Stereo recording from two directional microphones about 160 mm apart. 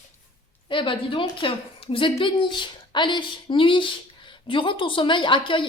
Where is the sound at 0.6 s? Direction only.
30° left (ahead or behind).